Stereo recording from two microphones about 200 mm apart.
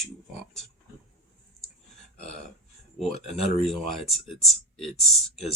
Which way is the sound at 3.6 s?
Centre (ahead or behind).